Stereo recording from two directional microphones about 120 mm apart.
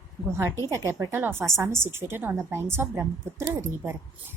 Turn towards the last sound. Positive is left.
turn(degrees=-20)  # may be behind; listen again after turning